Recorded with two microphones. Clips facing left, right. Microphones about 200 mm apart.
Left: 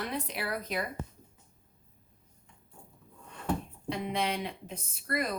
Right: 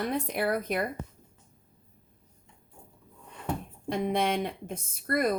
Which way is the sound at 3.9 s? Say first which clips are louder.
Right 5 dB; 50° right (ahead or behind).